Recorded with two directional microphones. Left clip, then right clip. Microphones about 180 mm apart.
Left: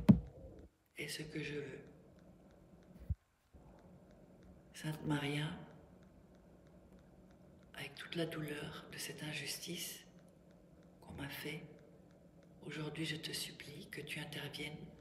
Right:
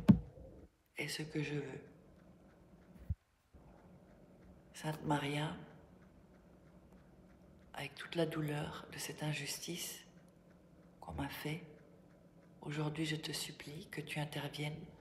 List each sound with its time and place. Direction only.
0.9 s speech: 15° right (ahead or behind)
4.7 s speech: 15° right (ahead or behind)
7.7 s speech: 15° right (ahead or behind)